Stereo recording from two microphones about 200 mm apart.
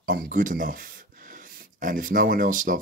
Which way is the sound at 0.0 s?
45° right (ahead or behind).